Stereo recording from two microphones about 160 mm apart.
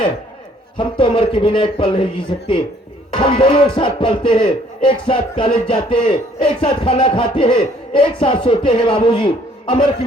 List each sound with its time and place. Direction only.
0.8 s speech: 30° left (ahead or behind)